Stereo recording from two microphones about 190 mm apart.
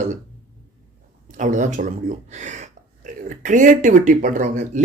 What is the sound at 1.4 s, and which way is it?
Speech, 40° right (ahead or behind).